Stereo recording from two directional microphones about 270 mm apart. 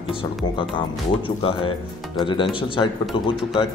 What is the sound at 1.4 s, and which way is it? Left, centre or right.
Speech, centre.